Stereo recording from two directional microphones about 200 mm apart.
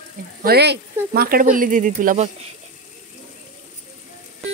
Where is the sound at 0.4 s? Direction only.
50° right (ahead or behind).